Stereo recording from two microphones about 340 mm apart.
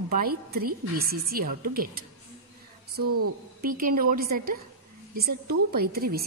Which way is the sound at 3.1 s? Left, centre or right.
Right.